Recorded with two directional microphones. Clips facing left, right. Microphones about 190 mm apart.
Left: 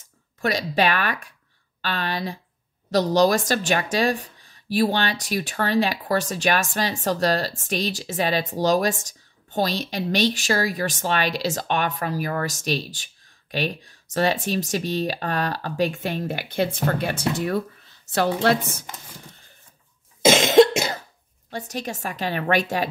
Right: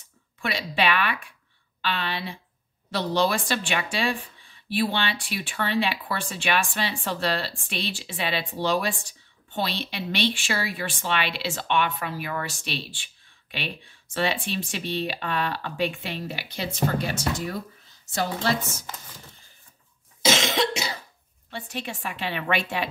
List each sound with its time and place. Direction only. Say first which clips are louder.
0.4 s speech: left 5 dB; 40° left (ahead or behind); by 18.9 s 60° left (ahead or behind)
20.2 s cough: left 10 dB; 50° left (ahead or behind)
21.5 s speech: left 4 dB; 40° left (ahead or behind)